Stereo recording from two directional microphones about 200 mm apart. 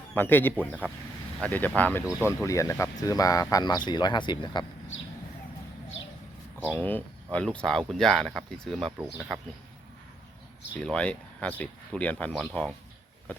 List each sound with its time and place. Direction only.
0.1 s speech: 10° left (ahead or behind)
2.0 s speech: 10° right (ahead or behind)
2.4 s speech: 15° left (ahead or behind)
6.6 s speech: 10° left (ahead or behind)
10.8 s speech: 5° left (ahead or behind)